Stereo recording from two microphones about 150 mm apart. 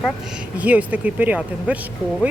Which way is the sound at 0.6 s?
10° right (ahead or behind).